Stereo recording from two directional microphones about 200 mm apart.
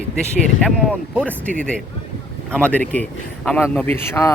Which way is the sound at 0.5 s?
5° right (ahead or behind).